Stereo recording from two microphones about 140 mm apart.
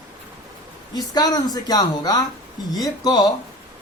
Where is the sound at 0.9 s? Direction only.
30° left (ahead or behind).